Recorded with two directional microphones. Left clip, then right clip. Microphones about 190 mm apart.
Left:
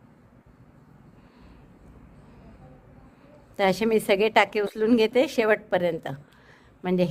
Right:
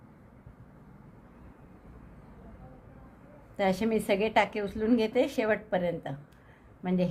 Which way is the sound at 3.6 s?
50° left (ahead or behind).